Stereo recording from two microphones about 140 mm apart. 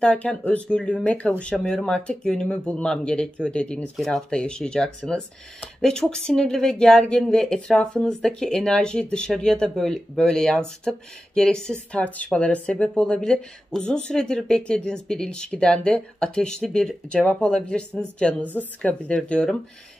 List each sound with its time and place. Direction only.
0.0 s speech: 5° left (ahead or behind)